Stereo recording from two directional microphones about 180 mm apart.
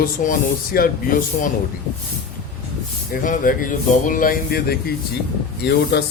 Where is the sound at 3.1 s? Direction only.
50° left (ahead or behind).